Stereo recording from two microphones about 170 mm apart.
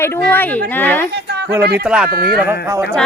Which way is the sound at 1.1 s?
75° right (ahead or behind).